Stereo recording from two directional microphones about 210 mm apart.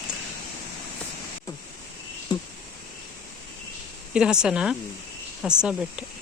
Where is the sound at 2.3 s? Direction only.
20° left (ahead or behind).